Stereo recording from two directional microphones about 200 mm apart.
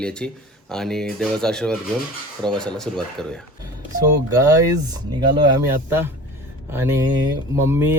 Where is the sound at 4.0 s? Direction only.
20° right (ahead or behind).